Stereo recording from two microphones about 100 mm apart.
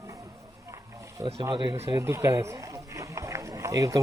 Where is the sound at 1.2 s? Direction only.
50° right (ahead or behind).